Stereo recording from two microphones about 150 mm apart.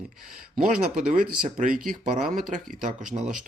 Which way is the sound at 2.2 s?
60° right (ahead or behind).